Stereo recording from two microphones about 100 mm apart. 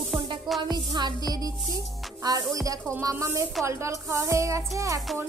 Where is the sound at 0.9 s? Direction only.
45° right (ahead or behind).